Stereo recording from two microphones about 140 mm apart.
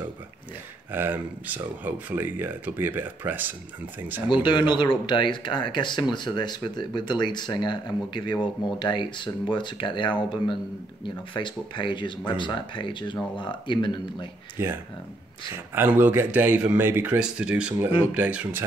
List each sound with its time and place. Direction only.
0.9 s speech: 15° right (ahead or behind)
4.3 s speech: 35° left (ahead or behind)
14.6 s speech: 15° right (ahead or behind)